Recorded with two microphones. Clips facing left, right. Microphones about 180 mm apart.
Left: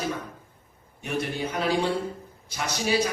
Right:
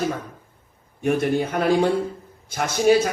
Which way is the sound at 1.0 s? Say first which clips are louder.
Right 9 dB; 50° right (ahead or behind).